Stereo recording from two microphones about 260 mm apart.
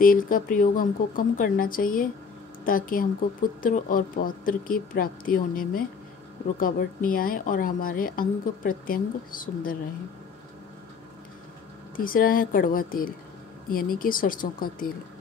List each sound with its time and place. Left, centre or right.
0.0 s a woman's voice: left
12.0 s a woman's voice: left